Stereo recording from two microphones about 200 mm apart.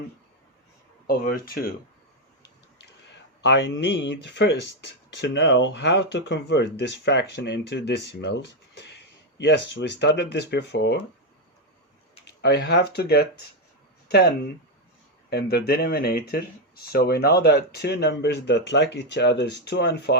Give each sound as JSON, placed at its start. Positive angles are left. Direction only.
{"t": 1.0, "sound": "speech", "side_deg": 50}
{"t": 3.4, "sound": "a man's voice", "side_deg": 60}
{"t": 12.2, "sound": "speech", "side_deg": 55}